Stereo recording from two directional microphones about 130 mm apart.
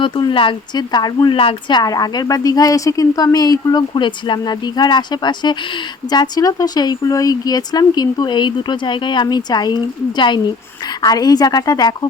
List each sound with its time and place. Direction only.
0.0 s speech: 40° left (ahead or behind)
1.4 s speech: 45° left (ahead or behind)
1.8 s speech: 30° left (ahead or behind)